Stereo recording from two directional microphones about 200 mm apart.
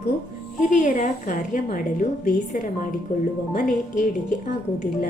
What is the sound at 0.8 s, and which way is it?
A woman's voice, 40° left (ahead or behind).